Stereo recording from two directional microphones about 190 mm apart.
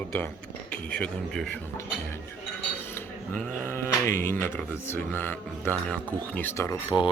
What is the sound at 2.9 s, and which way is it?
Speech, 10° left (ahead or behind).